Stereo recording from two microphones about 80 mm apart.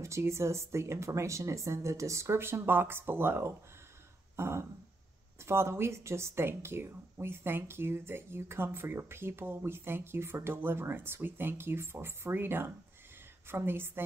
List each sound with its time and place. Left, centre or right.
0.0 s a woman's voice: right